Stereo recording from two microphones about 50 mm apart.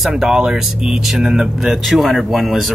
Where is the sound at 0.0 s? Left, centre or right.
Centre.